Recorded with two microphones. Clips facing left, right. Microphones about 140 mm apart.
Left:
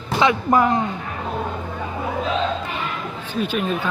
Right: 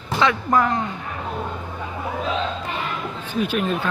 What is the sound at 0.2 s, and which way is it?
Speech, 15° left (ahead or behind).